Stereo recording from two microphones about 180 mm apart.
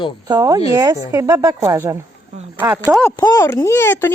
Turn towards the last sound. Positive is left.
turn(degrees=15)  # may be behind; listen again after turning